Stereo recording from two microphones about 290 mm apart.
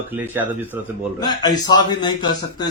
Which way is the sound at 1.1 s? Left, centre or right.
Centre.